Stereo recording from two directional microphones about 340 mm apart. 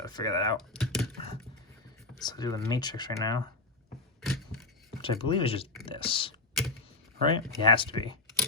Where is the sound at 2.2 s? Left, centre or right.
Centre.